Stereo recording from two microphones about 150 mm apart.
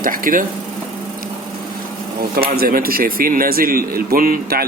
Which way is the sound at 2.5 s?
75° right (ahead or behind).